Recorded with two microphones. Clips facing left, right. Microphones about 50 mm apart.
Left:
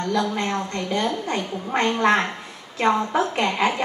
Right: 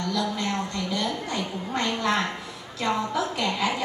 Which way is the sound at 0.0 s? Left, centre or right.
Left.